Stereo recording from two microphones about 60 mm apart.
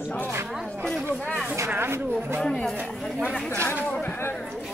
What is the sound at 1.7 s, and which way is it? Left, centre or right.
Speech, right.